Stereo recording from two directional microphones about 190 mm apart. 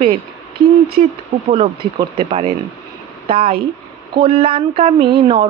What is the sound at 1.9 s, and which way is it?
Speech, 30° right (ahead or behind).